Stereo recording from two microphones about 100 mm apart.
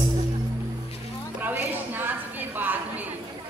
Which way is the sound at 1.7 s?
20° right (ahead or behind).